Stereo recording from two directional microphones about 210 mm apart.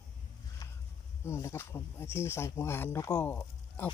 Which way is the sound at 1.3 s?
15° left (ahead or behind).